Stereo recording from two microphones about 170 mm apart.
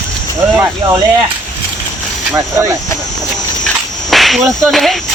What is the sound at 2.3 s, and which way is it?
Speech, 15° right (ahead or behind).